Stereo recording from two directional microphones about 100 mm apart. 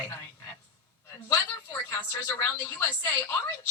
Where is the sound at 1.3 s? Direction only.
30° left (ahead or behind).